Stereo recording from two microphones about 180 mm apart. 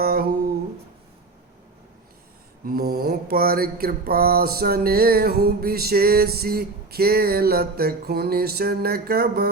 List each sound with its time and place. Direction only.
0.0 s humming: 60° right (ahead or behind)
2.6 s mantra: 55° right (ahead or behind)